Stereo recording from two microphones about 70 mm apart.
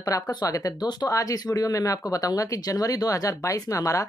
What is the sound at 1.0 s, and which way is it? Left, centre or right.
Speech, left.